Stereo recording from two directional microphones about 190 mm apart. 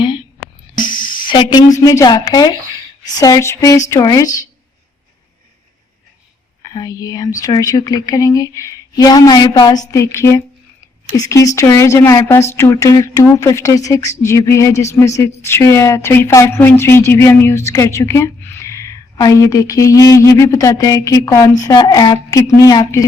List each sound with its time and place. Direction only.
0.8 s a woman's voice: 25° left (ahead or behind)
6.6 s a woman's voice: 20° left (ahead or behind)